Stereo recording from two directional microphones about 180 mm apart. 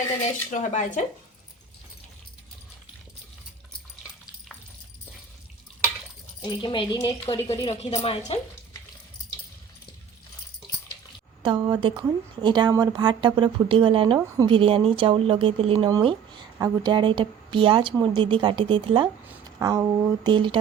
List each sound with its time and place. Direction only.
0.5 s speech: 45° left (ahead or behind)
6.4 s a woman's voice: 25° left (ahead or behind)
11.4 s speech: 25° right (ahead or behind)
19.5 s a sound: 20° right (ahead or behind)
20.2 s speech: 25° right (ahead or behind)